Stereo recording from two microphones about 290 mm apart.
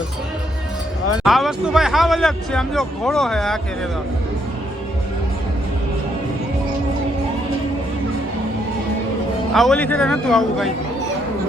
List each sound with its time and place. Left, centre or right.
1.2 s speech: centre
9.5 s speech: centre